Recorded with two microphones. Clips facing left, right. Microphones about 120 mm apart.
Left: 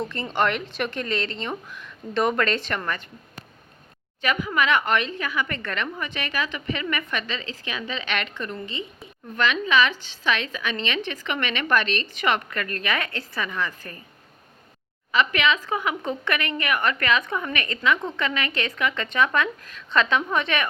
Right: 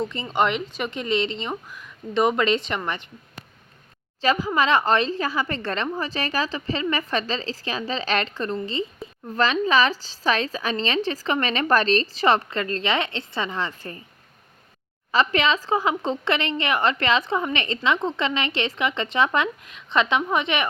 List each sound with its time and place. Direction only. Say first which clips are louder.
0.3 s a woman's voice: right 1 dB; 15° right (ahead or behind)
4.2 s a woman's voice: right 3 dB; 30° right (ahead or behind)
15.1 s a woman's voice: right 1 dB; 35° right (ahead or behind)